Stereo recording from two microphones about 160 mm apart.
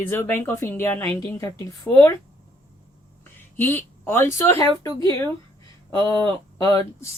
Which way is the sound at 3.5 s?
15° left (ahead or behind).